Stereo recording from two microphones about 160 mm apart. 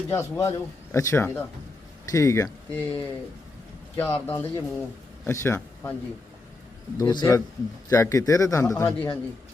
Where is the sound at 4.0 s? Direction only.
15° left (ahead or behind).